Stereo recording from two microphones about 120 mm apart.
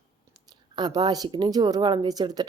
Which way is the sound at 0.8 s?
35° right (ahead or behind).